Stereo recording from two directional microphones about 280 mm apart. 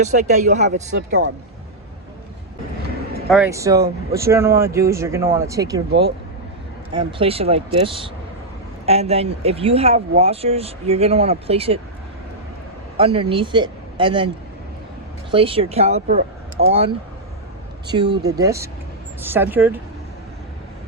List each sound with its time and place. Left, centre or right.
0.0 s speech: right
3.2 s speech: centre
5.9 s speech: right
6.9 s speech: centre
13.0 s speech: centre
15.3 s speech: centre
18.2 s speech: centre